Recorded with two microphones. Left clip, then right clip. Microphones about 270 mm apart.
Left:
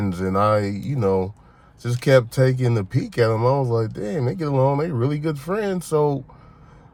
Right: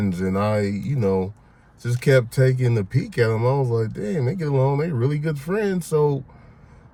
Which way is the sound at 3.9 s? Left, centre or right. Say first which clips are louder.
Left 1 dB; centre.